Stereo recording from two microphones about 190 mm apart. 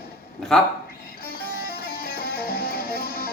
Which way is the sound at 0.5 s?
Centre (ahead or behind).